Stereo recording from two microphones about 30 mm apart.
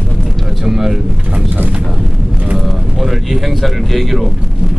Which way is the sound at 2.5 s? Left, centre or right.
Centre.